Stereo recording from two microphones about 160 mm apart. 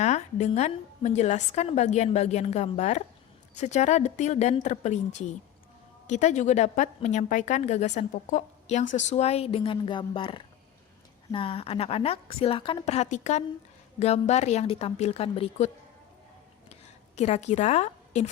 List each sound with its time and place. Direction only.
0.0 s a woman's voice: 45° left (ahead or behind)
17.2 s a woman's voice: 45° left (ahead or behind)